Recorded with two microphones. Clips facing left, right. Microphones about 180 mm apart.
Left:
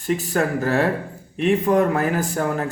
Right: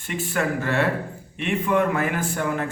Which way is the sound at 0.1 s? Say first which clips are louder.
Left 4 dB; 40° left (ahead or behind).